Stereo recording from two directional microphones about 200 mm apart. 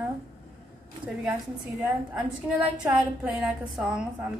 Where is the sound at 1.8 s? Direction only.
10° right (ahead or behind).